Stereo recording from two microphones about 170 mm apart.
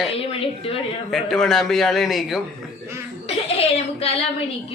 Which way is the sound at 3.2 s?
35° left (ahead or behind).